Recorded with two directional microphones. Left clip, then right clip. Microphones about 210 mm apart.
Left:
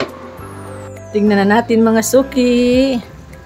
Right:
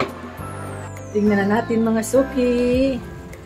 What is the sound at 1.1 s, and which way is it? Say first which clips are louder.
Music: left 6 dB; 40° left (ahead or behind).